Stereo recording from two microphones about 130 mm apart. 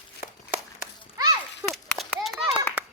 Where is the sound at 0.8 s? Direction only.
30° right (ahead or behind).